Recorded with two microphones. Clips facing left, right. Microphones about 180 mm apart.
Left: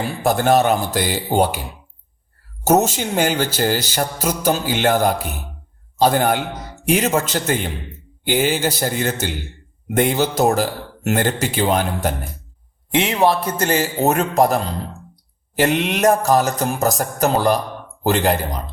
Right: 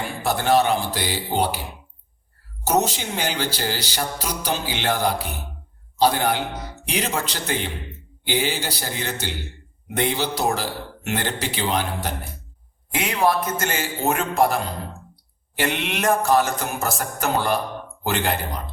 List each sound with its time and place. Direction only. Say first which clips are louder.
0.2 s speech: left 3 dB; 45° left (ahead or behind)
2.6 s speech: left 5 dB; 45° left (ahead or behind)
12.9 s a man's voice: left 4 dB; 25° left (ahead or behind); by 14.6 s 40° left (ahead or behind)
15.1 s a sound: left 8 dB; 40° left (ahead or behind)
18.0 s a man's voice: left 7 dB; 35° left (ahead or behind)